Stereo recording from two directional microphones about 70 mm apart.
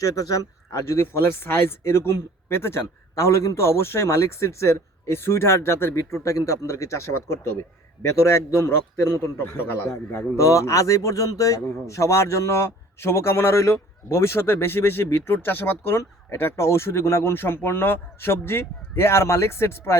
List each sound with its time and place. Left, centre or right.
0.0 s a man's voice: left
9.4 s a man's voice: left
10.3 s a man's voice: left